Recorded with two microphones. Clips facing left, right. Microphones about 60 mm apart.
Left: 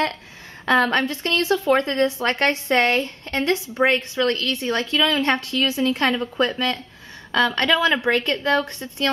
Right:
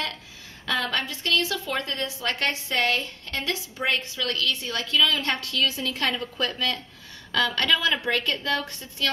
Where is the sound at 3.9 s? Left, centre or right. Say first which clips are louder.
Left 4 dB; left.